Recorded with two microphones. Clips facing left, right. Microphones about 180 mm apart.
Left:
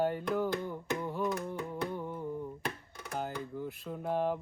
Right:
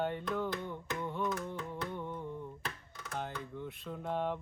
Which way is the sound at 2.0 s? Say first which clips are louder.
Left 2 dB; 10° left (ahead or behind).